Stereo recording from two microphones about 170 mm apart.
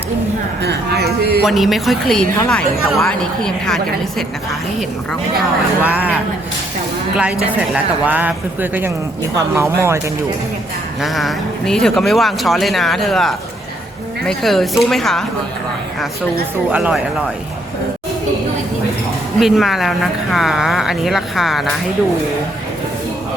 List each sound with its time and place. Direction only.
0.6 s speech: 70° right (ahead or behind)
1.5 s speech: centre (ahead or behind)
5.8 s a woman's voice: 10° right (ahead or behind)
7.2 s a woman's voice: 5° right (ahead or behind)
11.0 s speech: centre (ahead or behind)
16.7 s a woman's voice: 5° right (ahead or behind)
19.4 s speech: centre (ahead or behind)